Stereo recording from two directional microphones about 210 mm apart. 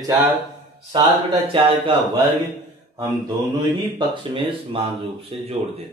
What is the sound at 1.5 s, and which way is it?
Speech, 25° right (ahead or behind).